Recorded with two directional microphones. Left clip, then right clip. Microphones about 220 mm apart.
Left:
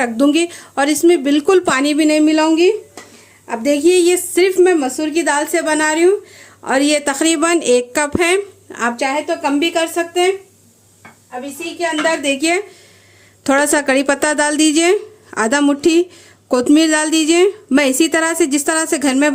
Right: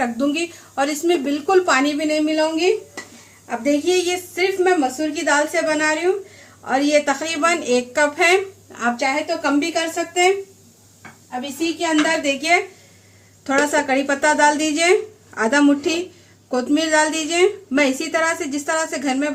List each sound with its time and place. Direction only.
0.0 s speech: 40° left (ahead or behind)
12.2 s speech: 45° left (ahead or behind)